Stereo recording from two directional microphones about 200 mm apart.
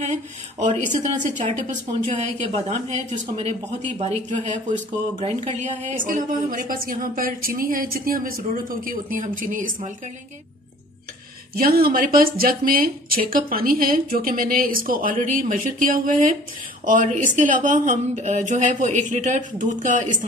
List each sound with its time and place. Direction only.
0.0 s speech: 35° right (ahead or behind)
4.0 s speech: 35° right (ahead or behind)
11.5 s speech: 50° right (ahead or behind)